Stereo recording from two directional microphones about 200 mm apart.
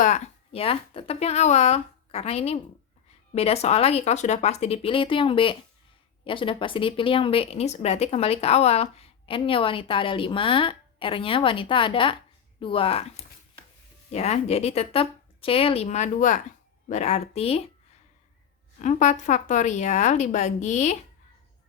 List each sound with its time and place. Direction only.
0.0 s a woman's voice: 35° left (ahead or behind)
18.8 s a woman's voice: 35° left (ahead or behind)